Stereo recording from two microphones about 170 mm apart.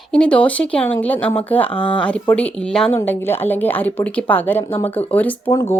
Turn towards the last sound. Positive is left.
turn(degrees=15)  # may be behind; listen again after turning